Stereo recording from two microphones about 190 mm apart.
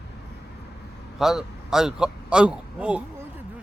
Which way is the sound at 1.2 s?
Centre (ahead or behind).